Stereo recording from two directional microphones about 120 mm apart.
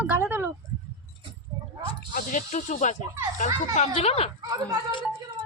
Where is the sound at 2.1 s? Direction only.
90° left.